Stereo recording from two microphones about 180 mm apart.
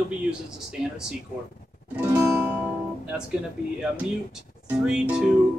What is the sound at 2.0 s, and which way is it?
Music, 15° right (ahead or behind).